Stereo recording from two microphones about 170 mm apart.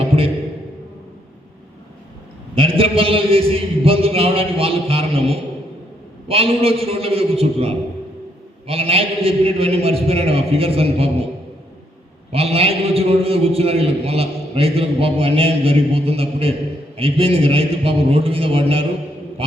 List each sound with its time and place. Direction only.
2.6 s a man's voice: 35° right (ahead or behind)
12.3 s a man's voice: 35° right (ahead or behind)